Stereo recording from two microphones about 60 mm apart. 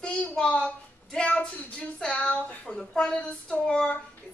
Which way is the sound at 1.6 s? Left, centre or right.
Centre.